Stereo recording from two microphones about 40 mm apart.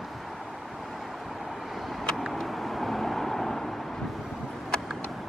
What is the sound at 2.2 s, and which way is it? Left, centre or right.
Vehicle, centre.